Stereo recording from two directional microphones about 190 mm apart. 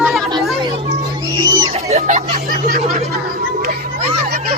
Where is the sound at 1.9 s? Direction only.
45° right (ahead or behind).